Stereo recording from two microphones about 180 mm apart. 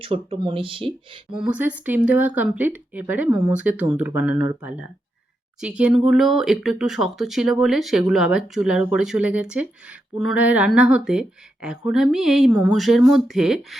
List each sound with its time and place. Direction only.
0.0 s speech: 30° right (ahead or behind)
1.3 s speech: 5° right (ahead or behind)
5.5 s speech: 5° right (ahead or behind)